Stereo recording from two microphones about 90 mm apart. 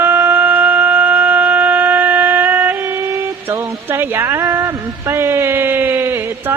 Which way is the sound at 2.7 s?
30° right (ahead or behind).